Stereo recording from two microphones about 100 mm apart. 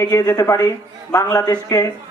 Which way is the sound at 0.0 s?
30° left (ahead or behind).